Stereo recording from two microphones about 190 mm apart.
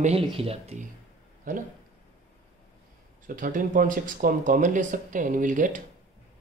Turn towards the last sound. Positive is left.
turn(degrees=-45)  # may be behind; listen again after turning